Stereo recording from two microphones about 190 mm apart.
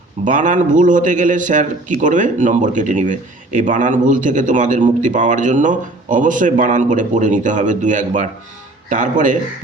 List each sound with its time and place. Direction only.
0.3 s a man's voice: 40° right (ahead or behind)